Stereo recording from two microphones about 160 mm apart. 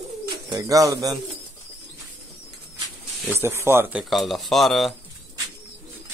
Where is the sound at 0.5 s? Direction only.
20° right (ahead or behind).